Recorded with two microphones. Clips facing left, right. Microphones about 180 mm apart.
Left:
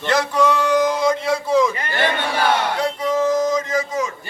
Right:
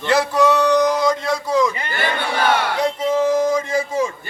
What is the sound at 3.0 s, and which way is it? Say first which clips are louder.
Speech: right 1 dB; 30° right (ahead or behind).